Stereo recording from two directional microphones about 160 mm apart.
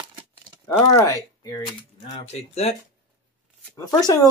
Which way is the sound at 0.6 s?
15° left (ahead or behind).